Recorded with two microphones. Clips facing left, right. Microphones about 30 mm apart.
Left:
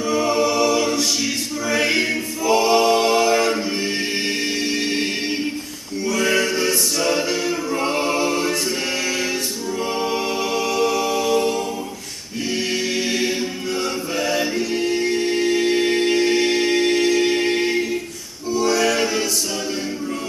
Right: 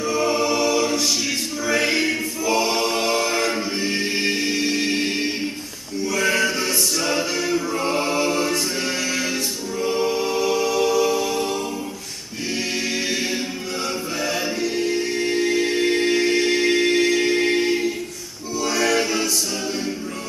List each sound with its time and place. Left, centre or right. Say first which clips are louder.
0.0 s choir: left 2 dB; centre
1.7 s a capella: left 1 dB; centre
6.0 s music: left 1 dB; centre
6.6 s a capella: left 2 dB; centre
8.3 s choir: left 1 dB; centre
9.8 s music: right 2 dB; left
12.4 s choir: left 2 dB; centre
14.6 s a capella: left 2 dB; centre
18.6 s music: left 2 dB; centre